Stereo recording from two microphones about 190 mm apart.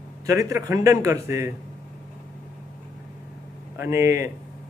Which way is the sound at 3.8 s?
15° right (ahead or behind).